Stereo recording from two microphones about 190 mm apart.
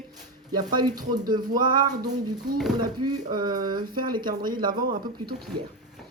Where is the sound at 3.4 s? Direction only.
20° right (ahead or behind).